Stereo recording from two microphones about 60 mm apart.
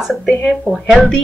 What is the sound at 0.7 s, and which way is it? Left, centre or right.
Speech, centre.